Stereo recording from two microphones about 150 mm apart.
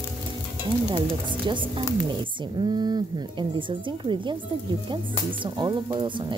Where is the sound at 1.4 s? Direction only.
35° right (ahead or behind).